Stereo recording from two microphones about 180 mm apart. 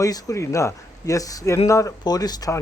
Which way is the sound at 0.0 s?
20° left (ahead or behind).